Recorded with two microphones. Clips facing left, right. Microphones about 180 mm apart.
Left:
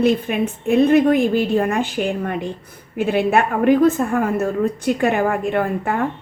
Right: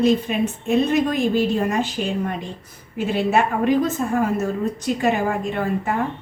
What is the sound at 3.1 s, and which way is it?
Speech, 55° left (ahead or behind).